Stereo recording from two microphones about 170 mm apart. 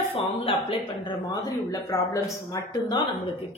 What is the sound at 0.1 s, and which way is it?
Speech, 35° left (ahead or behind).